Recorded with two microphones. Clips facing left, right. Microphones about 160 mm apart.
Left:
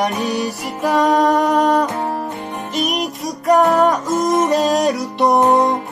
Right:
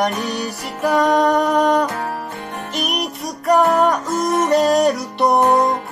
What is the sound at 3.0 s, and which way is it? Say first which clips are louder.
Music: left 2 dB; centre (ahead or behind).